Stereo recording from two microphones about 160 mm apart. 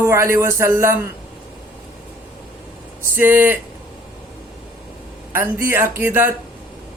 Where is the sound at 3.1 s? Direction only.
15° right (ahead or behind).